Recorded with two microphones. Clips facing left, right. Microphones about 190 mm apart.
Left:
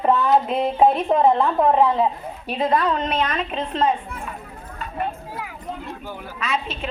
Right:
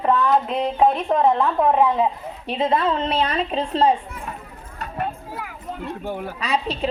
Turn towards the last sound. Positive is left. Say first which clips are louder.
# right 3 dB
turn(degrees=-35)  # may be behind; listen again after turning